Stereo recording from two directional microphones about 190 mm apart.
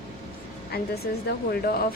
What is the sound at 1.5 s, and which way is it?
Speech, 55° left (ahead or behind).